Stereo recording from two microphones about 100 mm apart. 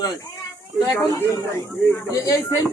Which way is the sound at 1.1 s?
30° left (ahead or behind).